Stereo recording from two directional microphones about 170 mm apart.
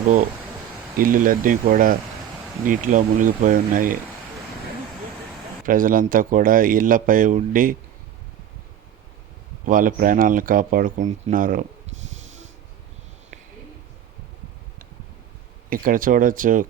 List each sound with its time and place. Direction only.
0.9 s speech: 55° right (ahead or behind)
5.6 s speech: 55° right (ahead or behind)
9.6 s speech: 55° right (ahead or behind)
15.7 s speech: 55° right (ahead or behind)